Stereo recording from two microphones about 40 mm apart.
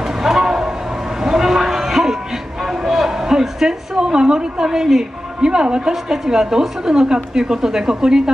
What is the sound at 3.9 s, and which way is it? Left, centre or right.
A woman's voice, right.